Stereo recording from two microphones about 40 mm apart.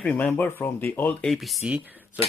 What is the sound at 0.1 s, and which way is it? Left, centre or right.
Speech, left.